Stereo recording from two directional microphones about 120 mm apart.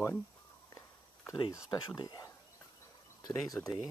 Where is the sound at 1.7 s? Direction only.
35° left (ahead or behind).